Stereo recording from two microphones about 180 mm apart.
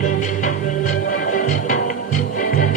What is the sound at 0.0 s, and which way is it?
Music, 45° left (ahead or behind).